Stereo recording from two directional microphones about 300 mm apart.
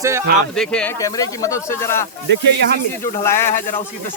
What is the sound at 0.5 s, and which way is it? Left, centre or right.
Speech, centre.